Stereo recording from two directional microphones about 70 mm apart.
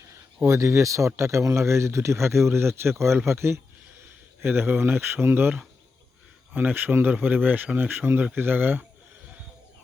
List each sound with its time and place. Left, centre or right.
0.4 s speech: right